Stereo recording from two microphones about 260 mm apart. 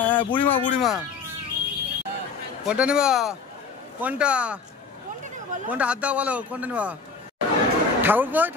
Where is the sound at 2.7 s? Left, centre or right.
Centre.